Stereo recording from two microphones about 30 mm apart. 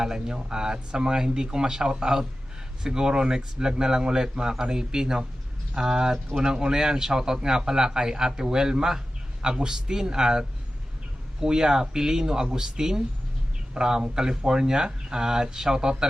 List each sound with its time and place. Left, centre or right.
0.0 s speech: right